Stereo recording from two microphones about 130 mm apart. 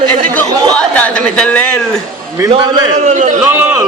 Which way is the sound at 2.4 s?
30° right (ahead or behind).